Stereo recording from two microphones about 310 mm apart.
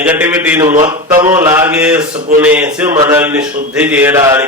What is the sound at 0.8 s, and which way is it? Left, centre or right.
Speech, centre.